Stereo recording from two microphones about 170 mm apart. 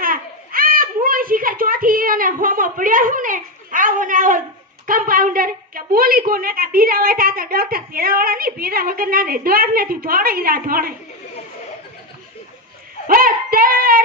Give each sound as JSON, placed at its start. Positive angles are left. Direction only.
{"t": 0.0, "sound": "a sound", "side_deg": -55}
{"t": 4.9, "sound": "a woman's voice", "side_deg": -55}
{"t": 13.1, "sound": "child singing", "side_deg": -55}